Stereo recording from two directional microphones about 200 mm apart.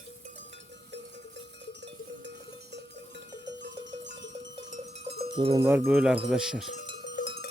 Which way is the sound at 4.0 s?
65° right (ahead or behind).